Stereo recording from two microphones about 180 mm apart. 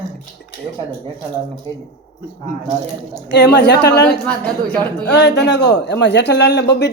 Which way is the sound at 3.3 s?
70° left (ahead or behind).